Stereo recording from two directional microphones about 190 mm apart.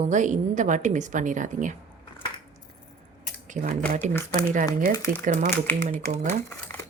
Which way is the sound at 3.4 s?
40° right (ahead or behind).